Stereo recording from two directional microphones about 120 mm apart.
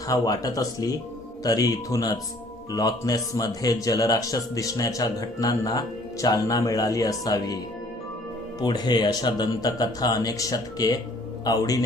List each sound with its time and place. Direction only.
0.1 s speech: 30° left (ahead or behind)
8.6 s speech: 35° left (ahead or behind)